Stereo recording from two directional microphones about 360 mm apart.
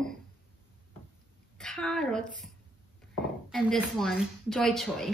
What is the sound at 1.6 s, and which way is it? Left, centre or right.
Speech, centre.